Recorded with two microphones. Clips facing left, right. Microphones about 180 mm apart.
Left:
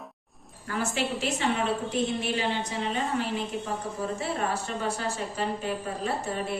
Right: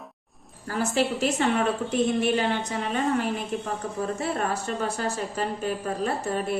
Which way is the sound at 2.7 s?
50° right (ahead or behind).